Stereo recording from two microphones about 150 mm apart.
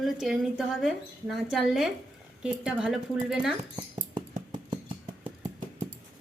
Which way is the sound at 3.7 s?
30° right (ahead or behind).